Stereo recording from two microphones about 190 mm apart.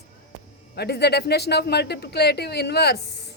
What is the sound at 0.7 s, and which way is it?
A woman's voice, 60° left (ahead or behind).